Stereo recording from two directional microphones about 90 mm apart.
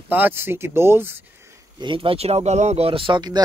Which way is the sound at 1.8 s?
75° right (ahead or behind).